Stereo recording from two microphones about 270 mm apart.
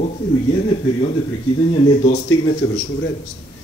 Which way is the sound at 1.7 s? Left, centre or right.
Left.